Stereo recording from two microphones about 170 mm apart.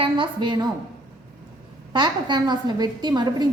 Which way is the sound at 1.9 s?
25° right (ahead or behind).